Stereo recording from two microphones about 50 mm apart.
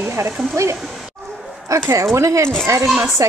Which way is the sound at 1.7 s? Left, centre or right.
Right.